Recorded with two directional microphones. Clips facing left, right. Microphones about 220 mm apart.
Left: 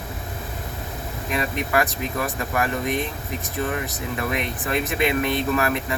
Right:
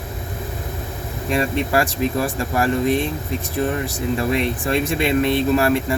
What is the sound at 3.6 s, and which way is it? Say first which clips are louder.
Speech: right 5 dB; 30° right (ahead or behind).